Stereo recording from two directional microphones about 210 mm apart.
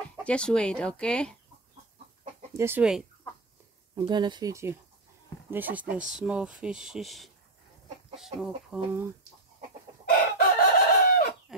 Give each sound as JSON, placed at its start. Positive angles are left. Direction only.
{"t": 0.2, "sound": "speech", "side_deg": 5}
{"t": 2.5, "sound": "speech", "side_deg": -10}
{"t": 3.9, "sound": "speech", "side_deg": -20}
{"t": 10.0, "sound": "chicken", "side_deg": 45}